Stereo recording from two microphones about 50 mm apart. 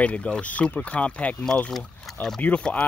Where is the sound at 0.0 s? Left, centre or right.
Left.